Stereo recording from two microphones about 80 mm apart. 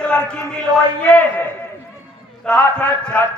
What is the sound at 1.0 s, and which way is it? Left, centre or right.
Speech, left.